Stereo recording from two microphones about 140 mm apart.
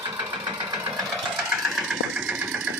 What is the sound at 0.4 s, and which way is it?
Engine, 30° right (ahead or behind).